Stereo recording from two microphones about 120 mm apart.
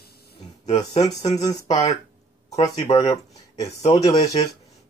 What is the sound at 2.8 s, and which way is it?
Speech, 60° left (ahead or behind).